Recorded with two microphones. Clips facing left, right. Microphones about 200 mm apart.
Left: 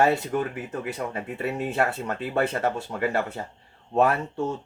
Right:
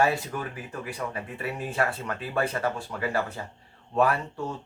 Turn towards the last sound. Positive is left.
turn(degrees=25)  # may be behind; listen again after turning